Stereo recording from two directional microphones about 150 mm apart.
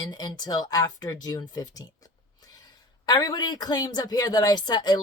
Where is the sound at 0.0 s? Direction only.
25° left (ahead or behind).